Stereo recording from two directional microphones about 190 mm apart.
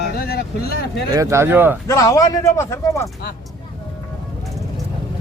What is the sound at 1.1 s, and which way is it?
Speech, 15° right (ahead or behind).